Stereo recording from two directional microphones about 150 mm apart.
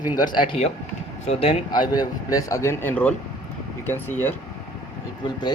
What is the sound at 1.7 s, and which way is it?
Speech, 25° left (ahead or behind).